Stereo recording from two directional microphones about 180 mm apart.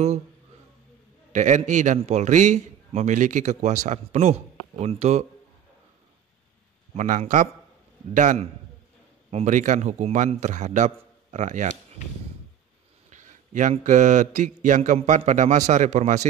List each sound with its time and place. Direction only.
1.3 s a man's voice: 45° right (ahead or behind)
7.0 s a man's voice: 40° right (ahead or behind)
13.1 s a man's voice: 45° right (ahead or behind)